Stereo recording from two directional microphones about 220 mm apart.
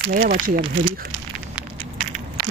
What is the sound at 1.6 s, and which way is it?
Crushing, 5° right (ahead or behind).